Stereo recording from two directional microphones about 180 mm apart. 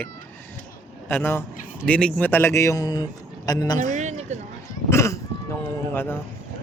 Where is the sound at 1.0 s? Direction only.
10° left (ahead or behind).